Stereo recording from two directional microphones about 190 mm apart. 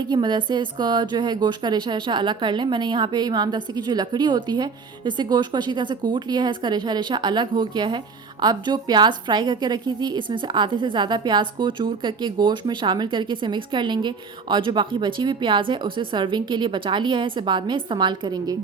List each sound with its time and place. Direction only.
0.0 s speech: 25° right (ahead or behind)